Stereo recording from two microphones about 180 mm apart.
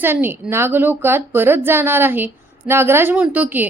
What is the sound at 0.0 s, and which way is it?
A woman's voice, 10° right (ahead or behind).